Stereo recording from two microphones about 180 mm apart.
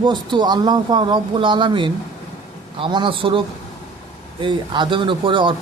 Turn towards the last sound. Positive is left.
turn(degrees=-25)  # may be behind; listen again after turning